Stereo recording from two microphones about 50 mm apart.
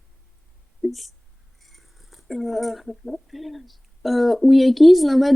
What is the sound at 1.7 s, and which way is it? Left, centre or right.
Speech, centre.